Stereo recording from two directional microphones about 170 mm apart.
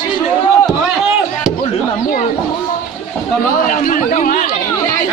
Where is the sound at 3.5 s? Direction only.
55° left (ahead or behind).